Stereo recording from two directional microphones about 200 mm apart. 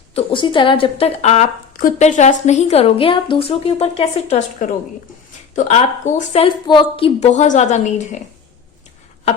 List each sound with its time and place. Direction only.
0.1 s a woman's voice: 30° left (ahead or behind)